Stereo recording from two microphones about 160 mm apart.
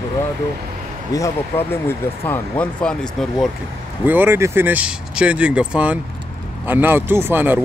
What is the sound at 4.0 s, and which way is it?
Speech, 10° right (ahead or behind).